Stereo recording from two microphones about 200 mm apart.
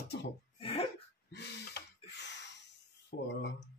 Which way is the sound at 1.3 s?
55° left (ahead or behind).